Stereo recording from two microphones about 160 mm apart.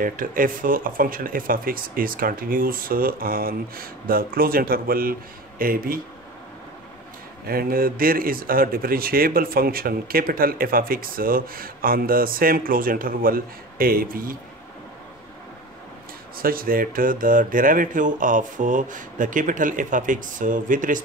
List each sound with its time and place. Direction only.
0.0 s speech: 60° right (ahead or behind)
7.4 s speech: 65° right (ahead or behind)
16.3 s speech: 65° right (ahead or behind)